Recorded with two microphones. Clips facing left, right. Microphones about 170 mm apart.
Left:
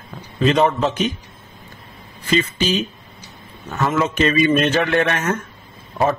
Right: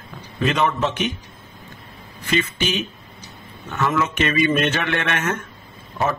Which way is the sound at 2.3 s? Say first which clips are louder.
Left 3 dB; 35° left (ahead or behind).